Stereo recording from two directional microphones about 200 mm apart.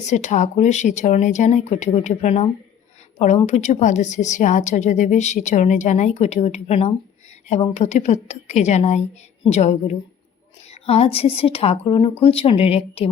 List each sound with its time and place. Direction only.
0.0 s a woman's voice: 35° left (ahead or behind)